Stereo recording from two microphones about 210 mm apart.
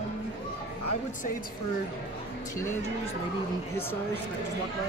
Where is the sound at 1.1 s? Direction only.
40° left (ahead or behind).